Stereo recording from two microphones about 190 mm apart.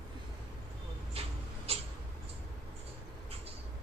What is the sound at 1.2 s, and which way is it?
Tick-tock, 30° right (ahead or behind).